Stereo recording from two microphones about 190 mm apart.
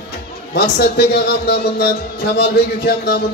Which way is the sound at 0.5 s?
55° left (ahead or behind).